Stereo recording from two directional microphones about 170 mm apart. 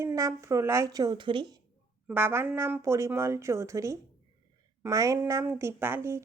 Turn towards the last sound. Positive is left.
turn(degrees=-15)  # may be behind; listen again after turning